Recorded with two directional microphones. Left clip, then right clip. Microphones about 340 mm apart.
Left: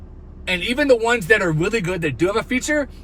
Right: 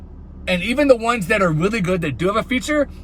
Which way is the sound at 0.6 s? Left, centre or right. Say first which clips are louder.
Right 1 dB; centre.